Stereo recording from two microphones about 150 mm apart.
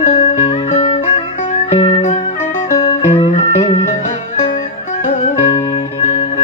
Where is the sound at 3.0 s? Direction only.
40° left (ahead or behind).